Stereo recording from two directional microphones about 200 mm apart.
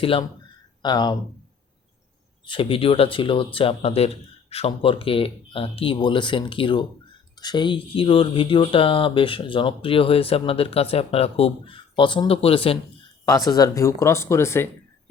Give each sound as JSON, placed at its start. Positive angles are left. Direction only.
{"t": 0.0, "sound": "speech", "side_deg": 25}
{"t": 2.5, "sound": "speech", "side_deg": 25}
{"t": 13.2, "sound": "speech", "side_deg": 15}